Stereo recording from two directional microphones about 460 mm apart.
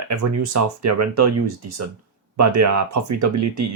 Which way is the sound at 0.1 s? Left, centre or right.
Right.